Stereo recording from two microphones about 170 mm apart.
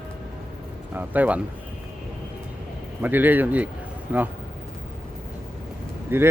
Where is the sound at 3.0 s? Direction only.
10° right (ahead or behind).